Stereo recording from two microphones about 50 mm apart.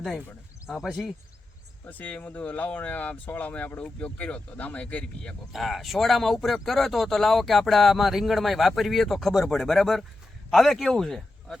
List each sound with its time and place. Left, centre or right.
1.9 s speech: left
5.5 s speech: centre